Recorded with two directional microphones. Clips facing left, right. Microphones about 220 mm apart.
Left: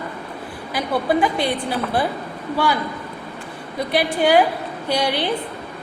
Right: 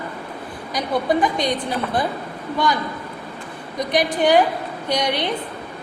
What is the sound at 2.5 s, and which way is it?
Speech, 10° left (ahead or behind).